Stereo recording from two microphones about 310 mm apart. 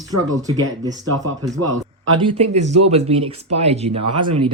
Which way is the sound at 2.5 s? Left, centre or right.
Right.